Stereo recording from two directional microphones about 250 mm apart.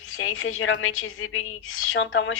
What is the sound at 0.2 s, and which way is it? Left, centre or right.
Speech, left.